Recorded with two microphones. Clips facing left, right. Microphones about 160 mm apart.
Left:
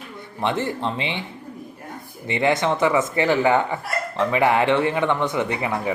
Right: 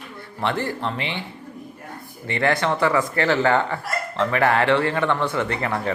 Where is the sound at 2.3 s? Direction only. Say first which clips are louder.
Left 1 dB; 20° left (ahead or behind).